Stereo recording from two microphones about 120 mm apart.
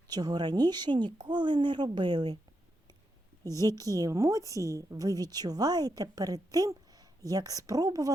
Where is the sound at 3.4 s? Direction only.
30° right (ahead or behind).